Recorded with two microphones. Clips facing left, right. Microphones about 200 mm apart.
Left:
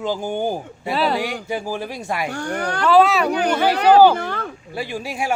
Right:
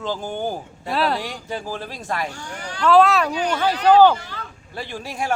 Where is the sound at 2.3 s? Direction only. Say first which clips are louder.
Left 10 dB; 60° left (ahead or behind).